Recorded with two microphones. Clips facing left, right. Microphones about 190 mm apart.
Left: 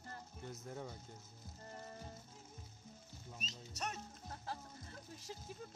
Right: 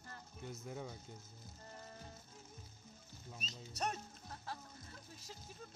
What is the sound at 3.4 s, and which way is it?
Speech, 35° right (ahead or behind).